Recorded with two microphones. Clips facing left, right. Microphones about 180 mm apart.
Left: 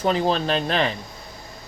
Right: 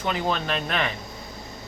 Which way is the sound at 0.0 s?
35° left (ahead or behind).